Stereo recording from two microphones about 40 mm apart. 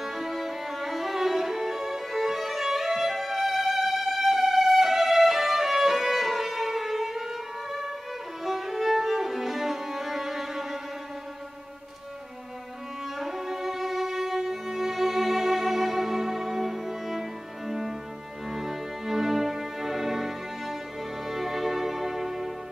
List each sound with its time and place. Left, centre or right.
0.0 s music: centre
8.5 s music: centre
13.2 s music: centre